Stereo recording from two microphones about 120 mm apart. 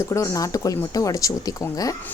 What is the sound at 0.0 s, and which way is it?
A woman's voice, 25° left (ahead or behind).